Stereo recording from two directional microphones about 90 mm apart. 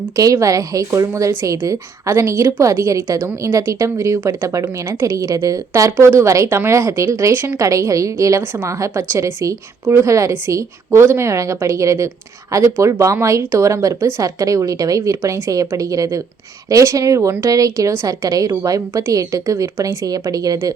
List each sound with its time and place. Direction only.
0.2 s a woman's voice: 40° right (ahead or behind)